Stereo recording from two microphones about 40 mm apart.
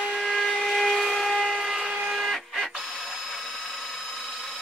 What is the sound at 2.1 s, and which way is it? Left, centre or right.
Printer, centre.